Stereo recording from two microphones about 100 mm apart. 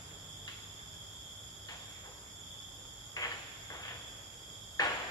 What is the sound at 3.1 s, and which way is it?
Cricket, 40° left (ahead or behind).